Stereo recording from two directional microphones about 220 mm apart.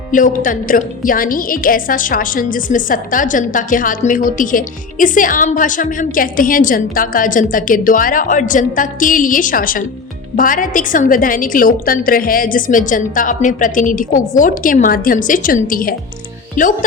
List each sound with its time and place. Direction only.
0.1 s a woman's voice: 40° left (ahead or behind)